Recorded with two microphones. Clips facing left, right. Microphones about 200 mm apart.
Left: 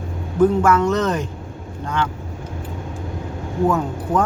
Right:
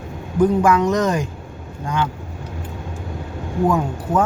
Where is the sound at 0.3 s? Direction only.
15° right (ahead or behind).